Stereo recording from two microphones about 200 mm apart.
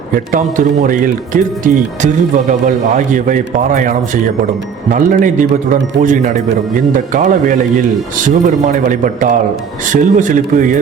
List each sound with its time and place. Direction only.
0.3 s speech: 40° right (ahead or behind)